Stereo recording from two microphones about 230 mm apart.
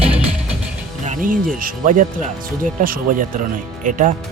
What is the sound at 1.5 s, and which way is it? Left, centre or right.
Speech, right.